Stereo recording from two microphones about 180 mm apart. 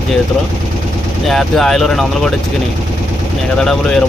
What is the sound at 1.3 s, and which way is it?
Speech, centre (ahead or behind).